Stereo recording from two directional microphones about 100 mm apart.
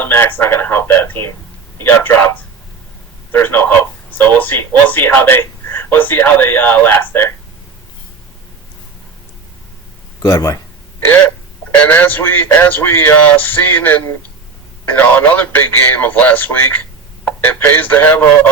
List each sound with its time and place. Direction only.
0.0 s speech: 20° left (ahead or behind)
10.2 s speech: 35° left (ahead or behind)
11.9 s speech: 20° left (ahead or behind)